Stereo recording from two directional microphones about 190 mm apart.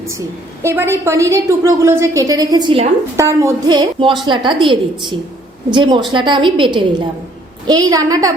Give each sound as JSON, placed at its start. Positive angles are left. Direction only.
{"t": 0.6, "sound": "a woman's voice", "side_deg": -15}
{"t": 7.9, "sound": "a woman's voice", "side_deg": -20}